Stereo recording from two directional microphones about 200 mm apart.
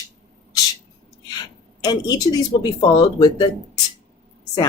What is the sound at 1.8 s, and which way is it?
Speech, 20° left (ahead or behind).